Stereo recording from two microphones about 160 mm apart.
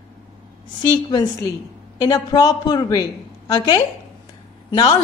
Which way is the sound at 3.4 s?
25° left (ahead or behind).